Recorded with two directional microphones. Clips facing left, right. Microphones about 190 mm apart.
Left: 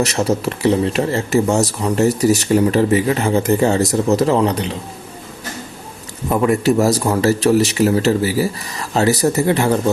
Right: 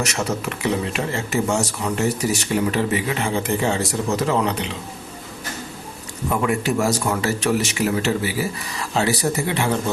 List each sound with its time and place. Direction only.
0.0 s speech: 35° left (ahead or behind)
6.4 s speech: 40° left (ahead or behind)